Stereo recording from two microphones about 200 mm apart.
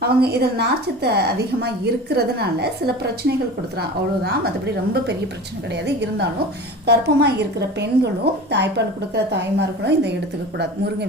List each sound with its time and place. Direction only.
0.0 s a woman's voice: 55° right (ahead or behind)